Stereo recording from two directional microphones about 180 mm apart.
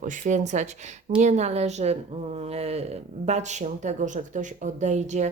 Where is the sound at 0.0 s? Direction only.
45° right (ahead or behind).